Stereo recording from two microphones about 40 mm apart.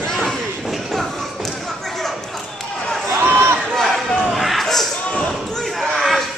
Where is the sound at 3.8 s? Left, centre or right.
Centre.